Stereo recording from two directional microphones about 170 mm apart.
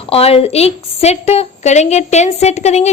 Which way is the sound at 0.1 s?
35° left (ahead or behind).